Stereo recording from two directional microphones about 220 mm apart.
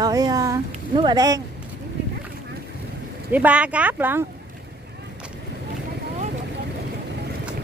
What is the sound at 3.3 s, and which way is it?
Speech, 5° right (ahead or behind).